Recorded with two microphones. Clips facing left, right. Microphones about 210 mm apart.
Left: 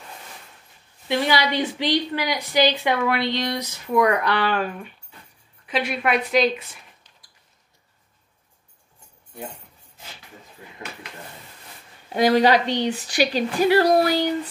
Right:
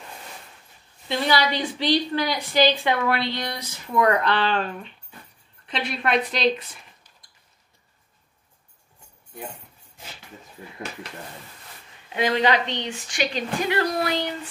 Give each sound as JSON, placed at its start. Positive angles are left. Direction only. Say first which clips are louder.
{"t": 1.0, "sound": "a woman's voice", "louder": "left 1 dB", "side_deg": 15}
{"t": 12.1, "sound": "speech", "louder": "left 5 dB", "side_deg": 40}